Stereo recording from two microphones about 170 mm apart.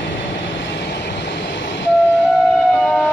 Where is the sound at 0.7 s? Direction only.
90° left.